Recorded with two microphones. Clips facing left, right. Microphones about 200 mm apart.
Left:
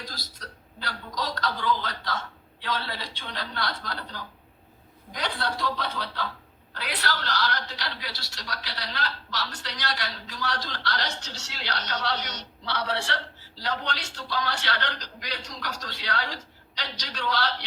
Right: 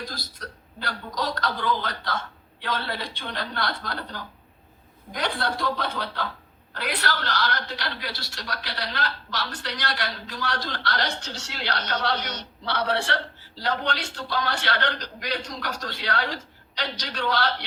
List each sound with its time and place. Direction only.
0.0 s a woman's voice: 55° right (ahead or behind)